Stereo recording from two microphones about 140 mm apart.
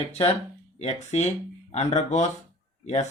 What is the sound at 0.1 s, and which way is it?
Speech, 50° left (ahead or behind).